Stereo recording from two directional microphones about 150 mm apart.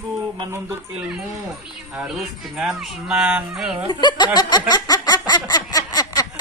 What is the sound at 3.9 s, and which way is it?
Snicker, 30° left (ahead or behind).